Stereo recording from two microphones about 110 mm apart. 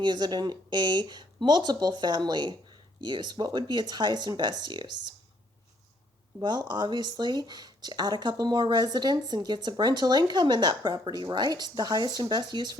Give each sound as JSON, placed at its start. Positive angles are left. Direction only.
{"t": 0.0, "sound": "speech", "side_deg": -40}
{"t": 6.4, "sound": "speech", "side_deg": -40}